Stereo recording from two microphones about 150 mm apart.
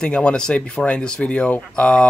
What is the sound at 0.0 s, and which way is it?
Speech, 5° left (ahead or behind).